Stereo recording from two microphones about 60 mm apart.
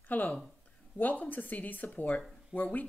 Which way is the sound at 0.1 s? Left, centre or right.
Left.